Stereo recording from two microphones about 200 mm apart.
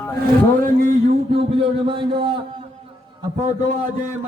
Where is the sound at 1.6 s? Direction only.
25° right (ahead or behind).